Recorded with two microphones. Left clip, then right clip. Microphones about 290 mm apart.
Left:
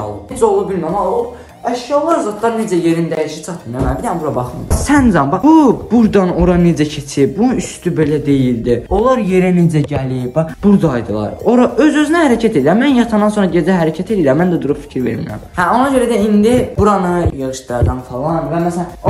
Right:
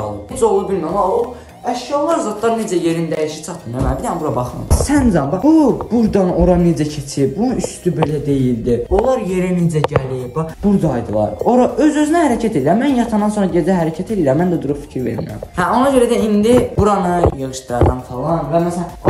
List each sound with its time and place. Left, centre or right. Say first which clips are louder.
0.4 s speech: left 2 dB; centre
1.7 s speech: left 3 dB; centre